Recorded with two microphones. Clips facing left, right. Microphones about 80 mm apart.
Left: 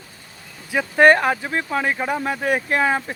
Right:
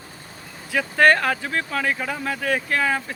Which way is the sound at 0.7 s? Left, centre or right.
Centre.